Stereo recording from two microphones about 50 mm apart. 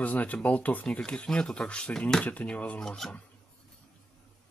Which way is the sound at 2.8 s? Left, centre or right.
Centre.